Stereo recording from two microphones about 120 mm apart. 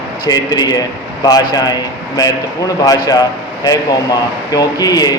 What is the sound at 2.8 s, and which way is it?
Speech, 30° left (ahead or behind).